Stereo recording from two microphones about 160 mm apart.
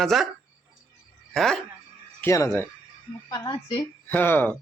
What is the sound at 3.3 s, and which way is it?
Speech, 30° left (ahead or behind).